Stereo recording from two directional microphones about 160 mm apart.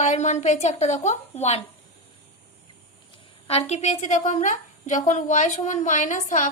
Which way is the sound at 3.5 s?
40° left (ahead or behind).